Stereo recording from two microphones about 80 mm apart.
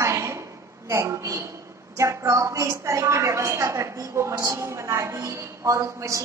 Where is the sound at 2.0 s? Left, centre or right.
Right.